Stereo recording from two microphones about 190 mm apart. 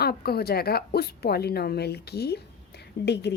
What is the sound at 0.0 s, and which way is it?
A woman's voice, 55° left (ahead or behind).